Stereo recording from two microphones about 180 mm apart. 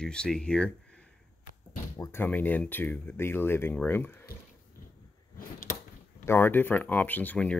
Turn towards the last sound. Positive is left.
turn(degrees=10)  # may be behind; listen again after turning